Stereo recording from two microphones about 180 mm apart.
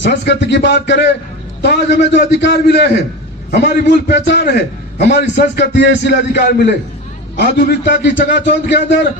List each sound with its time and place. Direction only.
0.0 s a man's voice: 75° left (ahead or behind)